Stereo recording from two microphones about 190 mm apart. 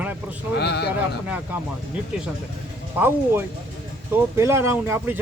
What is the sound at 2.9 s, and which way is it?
Speech, 10° right (ahead or behind).